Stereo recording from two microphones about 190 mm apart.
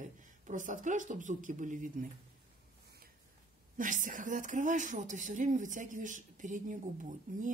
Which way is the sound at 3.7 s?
45° right (ahead or behind).